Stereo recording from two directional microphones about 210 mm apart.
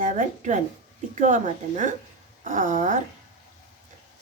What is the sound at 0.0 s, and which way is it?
A woman's voice, 35° right (ahead or behind).